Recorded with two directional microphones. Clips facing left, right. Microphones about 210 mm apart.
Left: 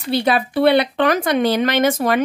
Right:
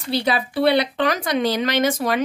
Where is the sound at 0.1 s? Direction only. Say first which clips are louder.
Left 4 dB; 55° left (ahead or behind).